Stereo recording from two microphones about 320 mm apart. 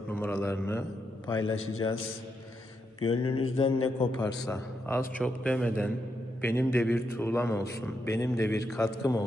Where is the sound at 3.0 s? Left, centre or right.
Centre.